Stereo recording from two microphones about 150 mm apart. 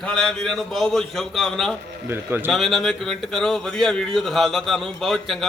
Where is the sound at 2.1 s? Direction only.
15° right (ahead or behind).